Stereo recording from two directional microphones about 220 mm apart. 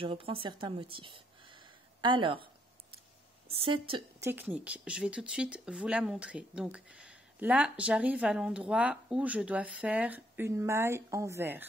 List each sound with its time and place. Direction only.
0.0 s speech: 25° right (ahead or behind)
3.4 s a woman's voice: 25° right (ahead or behind)
4.2 s speech: 10° right (ahead or behind)